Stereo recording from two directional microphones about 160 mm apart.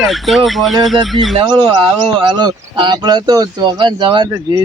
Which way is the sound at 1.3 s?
30° right (ahead or behind).